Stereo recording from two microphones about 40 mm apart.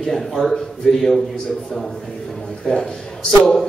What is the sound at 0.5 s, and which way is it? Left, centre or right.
Speech, centre.